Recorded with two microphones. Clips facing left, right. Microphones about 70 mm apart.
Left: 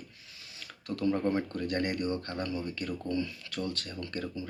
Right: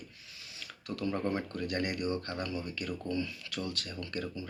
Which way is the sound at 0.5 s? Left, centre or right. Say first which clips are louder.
Left 3 dB; left.